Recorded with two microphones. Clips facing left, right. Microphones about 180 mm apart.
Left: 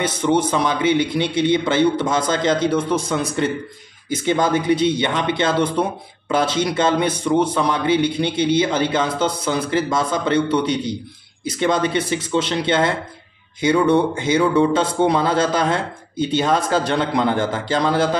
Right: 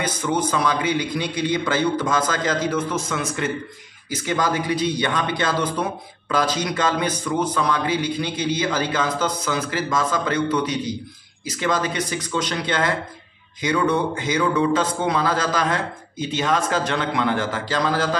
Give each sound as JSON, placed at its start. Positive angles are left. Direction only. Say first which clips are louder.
{"t": 0.0, "sound": "speech", "louder": "left 5 dB", "side_deg": 25}